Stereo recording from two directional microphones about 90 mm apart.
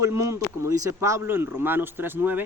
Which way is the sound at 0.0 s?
35° right (ahead or behind).